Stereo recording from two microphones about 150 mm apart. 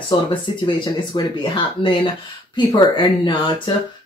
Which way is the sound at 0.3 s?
30° left (ahead or behind).